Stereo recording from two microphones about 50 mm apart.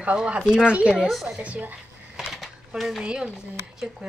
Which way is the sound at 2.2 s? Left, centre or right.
Centre.